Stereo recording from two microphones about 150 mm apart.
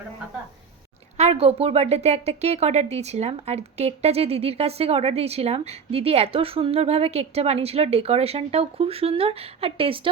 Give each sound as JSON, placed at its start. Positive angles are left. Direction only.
{"t": 1.1, "sound": "a woman's voice", "side_deg": -45}